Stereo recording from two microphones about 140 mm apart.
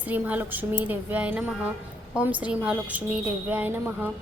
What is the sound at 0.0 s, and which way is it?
A woman's voice, 10° right (ahead or behind).